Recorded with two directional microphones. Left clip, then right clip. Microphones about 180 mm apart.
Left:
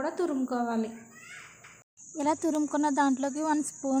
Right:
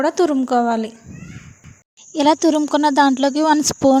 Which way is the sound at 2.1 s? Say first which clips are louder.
Right 13 dB; 45° right (ahead or behind).